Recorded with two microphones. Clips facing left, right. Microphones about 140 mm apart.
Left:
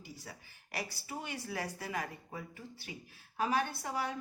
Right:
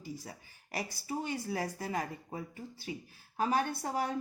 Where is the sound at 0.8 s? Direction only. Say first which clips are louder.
Right 5 dB; 35° right (ahead or behind).